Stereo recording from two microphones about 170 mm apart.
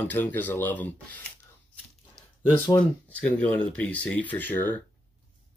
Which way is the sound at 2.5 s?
20° left (ahead or behind).